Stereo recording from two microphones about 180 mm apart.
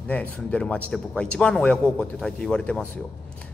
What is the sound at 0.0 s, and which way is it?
Speech, 5° left (ahead or behind).